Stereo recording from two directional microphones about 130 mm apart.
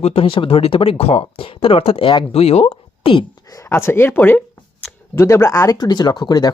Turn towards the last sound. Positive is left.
turn(degrees=30)  # may be behind; listen again after turning